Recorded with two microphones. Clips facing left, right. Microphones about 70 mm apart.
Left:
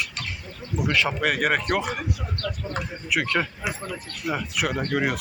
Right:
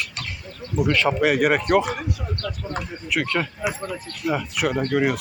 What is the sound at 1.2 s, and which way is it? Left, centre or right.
Speech, centre.